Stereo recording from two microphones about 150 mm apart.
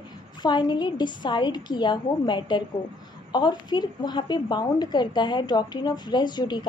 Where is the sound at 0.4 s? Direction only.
30° left (ahead or behind).